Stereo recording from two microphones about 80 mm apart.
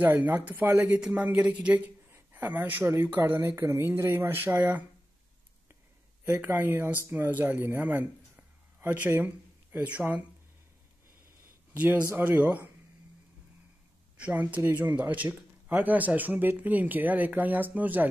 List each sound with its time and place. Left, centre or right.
0.0 s speech: right
6.2 s a man's voice: right
11.7 s speech: right
14.1 s speech: centre